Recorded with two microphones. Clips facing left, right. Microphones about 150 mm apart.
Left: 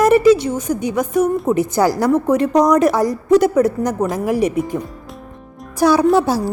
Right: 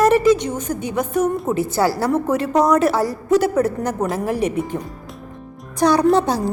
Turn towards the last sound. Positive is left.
turn(degrees=5)  # may be behind; listen again after turning